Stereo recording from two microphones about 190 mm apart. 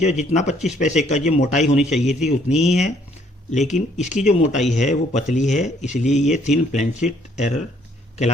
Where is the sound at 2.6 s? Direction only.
35° left (ahead or behind).